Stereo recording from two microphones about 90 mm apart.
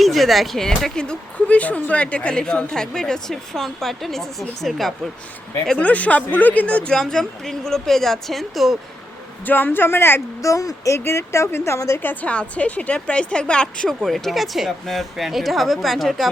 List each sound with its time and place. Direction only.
0.0 s speech: centre (ahead or behind)
5.6 s speech: 15° left (ahead or behind); by 8.8 s centre (ahead or behind)
9.5 s speech: 20° left (ahead or behind)
12.2 s a woman's voice: 15° left (ahead or behind)
14.0 s speech: centre (ahead or behind)